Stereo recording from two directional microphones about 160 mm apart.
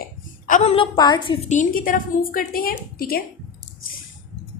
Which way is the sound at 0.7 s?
30° left (ahead or behind).